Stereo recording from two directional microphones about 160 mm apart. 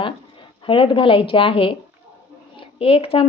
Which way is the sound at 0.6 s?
30° left (ahead or behind).